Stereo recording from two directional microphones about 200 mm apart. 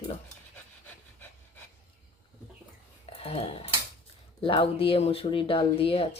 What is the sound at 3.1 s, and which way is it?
Speech, 30° left (ahead or behind).